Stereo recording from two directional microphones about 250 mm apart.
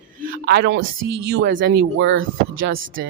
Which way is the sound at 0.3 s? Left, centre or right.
Right.